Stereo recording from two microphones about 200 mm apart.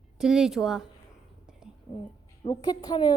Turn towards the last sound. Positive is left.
turn(degrees=20)  # may be behind; listen again after turning